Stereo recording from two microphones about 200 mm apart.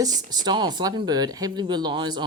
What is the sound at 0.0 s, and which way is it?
Speech, 20° right (ahead or behind).